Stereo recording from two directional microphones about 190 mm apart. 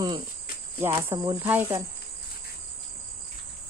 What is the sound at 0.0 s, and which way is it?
Cricket, 25° right (ahead or behind).